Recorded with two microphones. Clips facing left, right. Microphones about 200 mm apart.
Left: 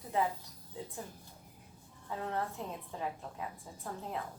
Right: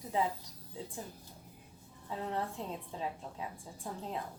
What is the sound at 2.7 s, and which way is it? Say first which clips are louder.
A woman's voice: even; 20° right (ahead or behind).